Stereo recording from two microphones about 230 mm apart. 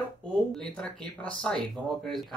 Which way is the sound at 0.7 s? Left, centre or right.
Centre.